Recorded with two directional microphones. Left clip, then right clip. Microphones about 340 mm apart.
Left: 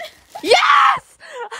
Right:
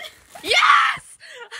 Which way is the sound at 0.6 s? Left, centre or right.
Centre.